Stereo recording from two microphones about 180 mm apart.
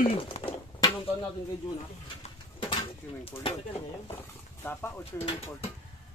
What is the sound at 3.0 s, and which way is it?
Speech, 10° left (ahead or behind).